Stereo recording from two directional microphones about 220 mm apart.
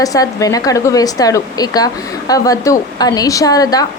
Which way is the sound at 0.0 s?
15° left (ahead or behind).